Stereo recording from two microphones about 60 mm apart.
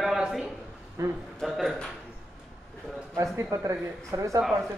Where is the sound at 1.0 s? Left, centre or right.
Right.